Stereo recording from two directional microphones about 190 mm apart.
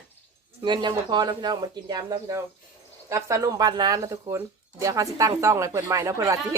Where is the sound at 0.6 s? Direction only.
25° right (ahead or behind).